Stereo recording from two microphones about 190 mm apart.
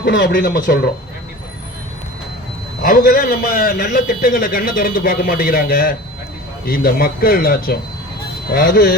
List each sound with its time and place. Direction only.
0.0 s speech: 60° left (ahead or behind)
2.8 s a man's voice: 50° left (ahead or behind)